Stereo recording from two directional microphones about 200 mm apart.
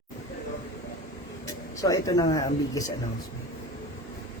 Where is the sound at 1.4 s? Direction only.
15° left (ahead or behind).